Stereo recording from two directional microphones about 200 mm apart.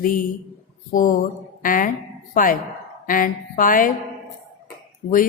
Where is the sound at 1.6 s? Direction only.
45° left (ahead or behind).